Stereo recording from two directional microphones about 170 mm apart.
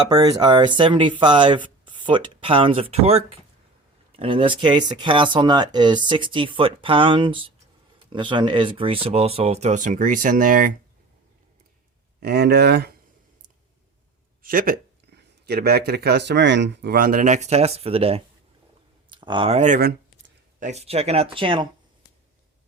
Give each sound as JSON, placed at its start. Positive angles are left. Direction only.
{"t": 0.1, "sound": "speech", "side_deg": -25}
{"t": 12.2, "sound": "speech", "side_deg": -75}
{"t": 14.4, "sound": "speech", "side_deg": -55}